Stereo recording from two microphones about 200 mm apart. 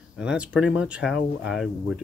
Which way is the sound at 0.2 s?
5° right (ahead or behind).